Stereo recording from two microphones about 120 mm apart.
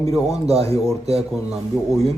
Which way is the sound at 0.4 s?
55° right (ahead or behind).